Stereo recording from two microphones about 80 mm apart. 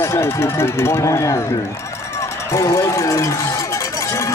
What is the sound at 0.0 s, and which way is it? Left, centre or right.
Speech, left.